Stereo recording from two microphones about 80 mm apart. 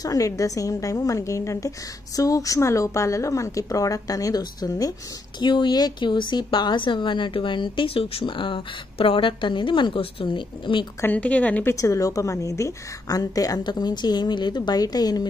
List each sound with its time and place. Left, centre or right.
0.0 s a woman's voice: left
5.4 s a woman's voice: left
11.1 s a woman's voice: centre
11.7 s a woman's voice: left